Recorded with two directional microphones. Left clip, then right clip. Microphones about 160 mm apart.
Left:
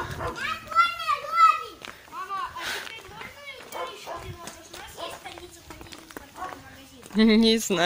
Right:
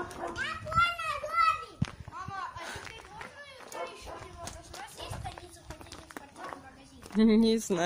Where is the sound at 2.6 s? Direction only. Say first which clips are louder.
Left 9 dB; 5° right (ahead or behind).